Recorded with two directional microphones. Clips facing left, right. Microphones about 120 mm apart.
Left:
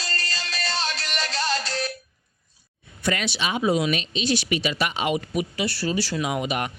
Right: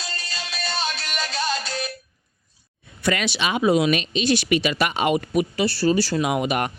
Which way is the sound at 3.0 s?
80° right.